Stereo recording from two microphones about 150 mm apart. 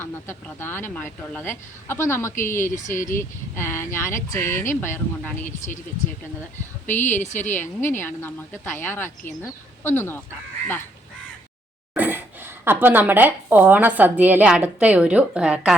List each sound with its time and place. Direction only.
0.0 s speech: 15° left (ahead or behind)
5.5 s a woman's voice: 55° left (ahead or behind)
7.0 s a woman's voice: 55° left (ahead or behind)
7.8 s speech: 15° left (ahead or behind)
11.9 s speech: 10° right (ahead or behind)